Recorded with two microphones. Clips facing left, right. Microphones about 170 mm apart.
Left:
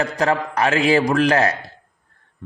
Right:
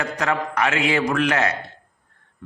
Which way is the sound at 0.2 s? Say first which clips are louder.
Left 2 dB; 35° left (ahead or behind).